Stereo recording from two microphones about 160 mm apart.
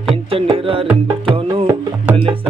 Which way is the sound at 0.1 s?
35° right (ahead or behind).